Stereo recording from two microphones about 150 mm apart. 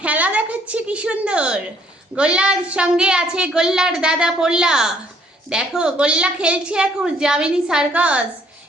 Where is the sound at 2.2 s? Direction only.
5° right (ahead or behind).